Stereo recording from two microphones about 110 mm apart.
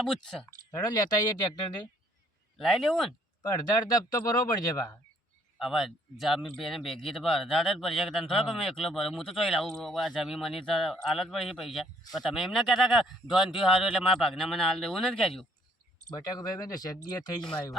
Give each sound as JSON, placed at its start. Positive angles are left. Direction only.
{"t": 0.7, "sound": "speech", "side_deg": 35}
{"t": 2.6, "sound": "speech", "side_deg": 0}
{"t": 3.5, "sound": "speech", "side_deg": 35}
{"t": 5.5, "sound": "speech", "side_deg": 0}
{"t": 16.0, "sound": "speech", "side_deg": 35}